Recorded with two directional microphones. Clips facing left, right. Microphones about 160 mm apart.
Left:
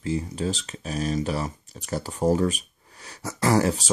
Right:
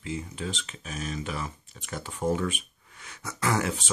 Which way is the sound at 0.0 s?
35° left (ahead or behind).